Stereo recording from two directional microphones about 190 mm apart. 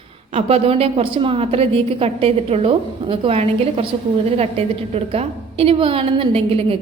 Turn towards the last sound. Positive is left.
turn(degrees=-30)  # may be behind; listen again after turning